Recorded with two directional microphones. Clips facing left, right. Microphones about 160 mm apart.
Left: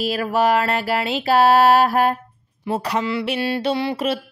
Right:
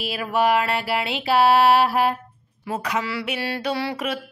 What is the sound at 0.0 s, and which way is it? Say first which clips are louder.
Mantra: left 3 dB; 40° left (ahead or behind).